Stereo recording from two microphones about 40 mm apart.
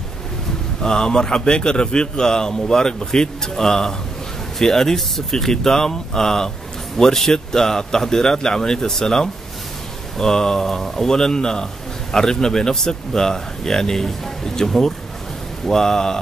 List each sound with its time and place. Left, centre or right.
0.8 s a man's voice: centre